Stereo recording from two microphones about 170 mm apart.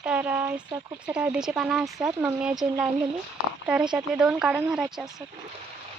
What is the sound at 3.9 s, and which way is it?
Speech, 5° right (ahead or behind).